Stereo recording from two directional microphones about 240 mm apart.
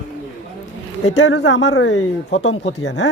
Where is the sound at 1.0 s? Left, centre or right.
Left.